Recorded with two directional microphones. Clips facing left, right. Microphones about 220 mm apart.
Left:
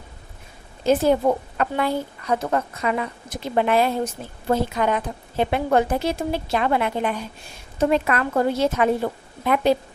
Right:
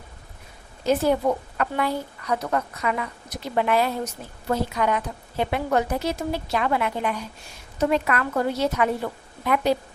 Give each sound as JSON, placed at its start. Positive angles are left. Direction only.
{"t": 0.9, "sound": "a woman's voice", "side_deg": 25}